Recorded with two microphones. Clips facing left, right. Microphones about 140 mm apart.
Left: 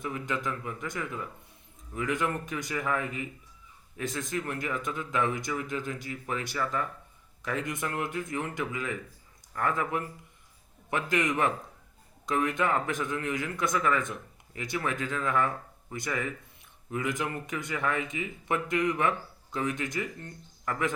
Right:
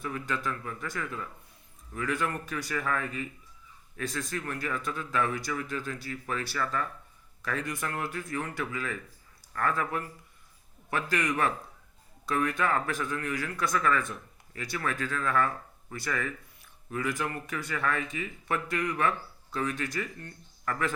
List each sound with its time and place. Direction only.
0.0 s a man's voice: 20° left (ahead or behind)